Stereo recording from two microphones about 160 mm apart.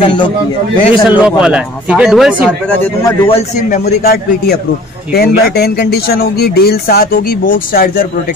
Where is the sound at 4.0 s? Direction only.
70° left (ahead or behind).